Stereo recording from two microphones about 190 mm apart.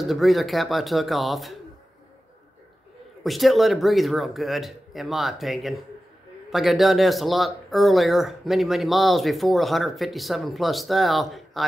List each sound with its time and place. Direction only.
0.0 s speech: centre (ahead or behind)
3.3 s speech: centre (ahead or behind)